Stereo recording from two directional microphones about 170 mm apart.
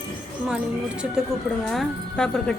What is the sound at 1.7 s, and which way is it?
Speech, 5° left (ahead or behind).